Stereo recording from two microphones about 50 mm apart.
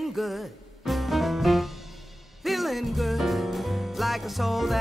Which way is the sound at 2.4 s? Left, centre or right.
Centre.